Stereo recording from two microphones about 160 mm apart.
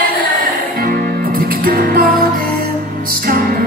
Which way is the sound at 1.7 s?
65° right (ahead or behind).